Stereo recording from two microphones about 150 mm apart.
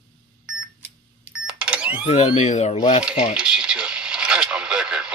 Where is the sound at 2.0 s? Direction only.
40° left (ahead or behind).